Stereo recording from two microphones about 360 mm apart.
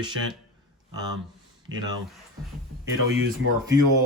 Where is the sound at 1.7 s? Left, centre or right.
Right.